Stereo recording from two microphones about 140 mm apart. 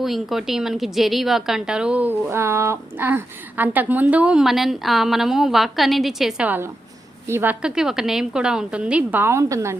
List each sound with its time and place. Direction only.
0.0 s a woman's voice: centre (ahead or behind); by 7.5 s 20° right (ahead or behind)
7.6 s a woman's voice: 5° right (ahead or behind); by 9.7 s 25° right (ahead or behind)